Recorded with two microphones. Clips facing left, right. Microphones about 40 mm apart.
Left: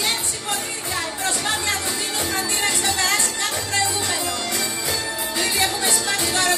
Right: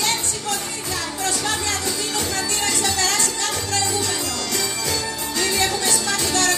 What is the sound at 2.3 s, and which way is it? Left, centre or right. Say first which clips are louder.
Music: left 1 dB; left.